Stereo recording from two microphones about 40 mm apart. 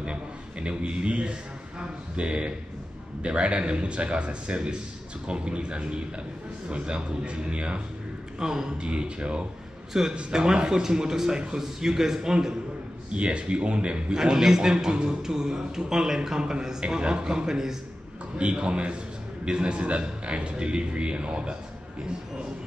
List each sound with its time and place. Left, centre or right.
0.0 s a man's voice: right
8.4 s a man's voice: centre
9.9 s a man's voice: centre
13.1 s a man's voice: right
14.1 s a man's voice: centre
18.4 s a man's voice: right